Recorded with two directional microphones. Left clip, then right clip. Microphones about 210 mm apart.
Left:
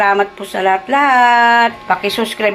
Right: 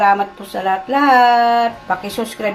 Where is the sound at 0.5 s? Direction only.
20° left (ahead or behind).